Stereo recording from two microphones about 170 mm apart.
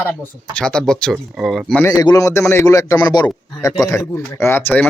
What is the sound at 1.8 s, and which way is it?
A man's voice, 20° left (ahead or behind).